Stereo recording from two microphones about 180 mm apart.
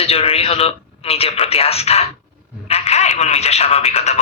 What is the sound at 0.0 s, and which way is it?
Speech, 35° left (ahead or behind).